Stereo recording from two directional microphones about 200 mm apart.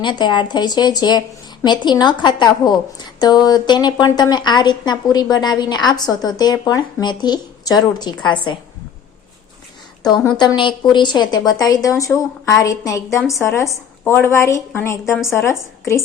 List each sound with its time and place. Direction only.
0.0 s a woman's voice: 20° left (ahead or behind)
10.3 s a woman's voice: 20° left (ahead or behind)